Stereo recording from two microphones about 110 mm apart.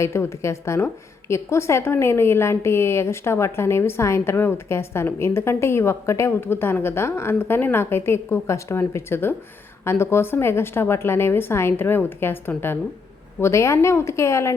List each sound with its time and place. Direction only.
0.0 s a woman's voice: 25° left (ahead or behind)